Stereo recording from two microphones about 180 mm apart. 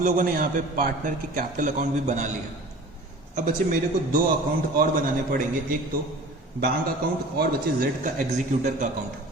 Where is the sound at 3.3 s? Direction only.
45° right (ahead or behind).